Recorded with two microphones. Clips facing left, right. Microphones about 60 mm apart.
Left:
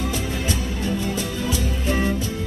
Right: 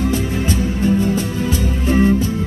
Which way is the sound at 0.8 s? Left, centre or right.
Right.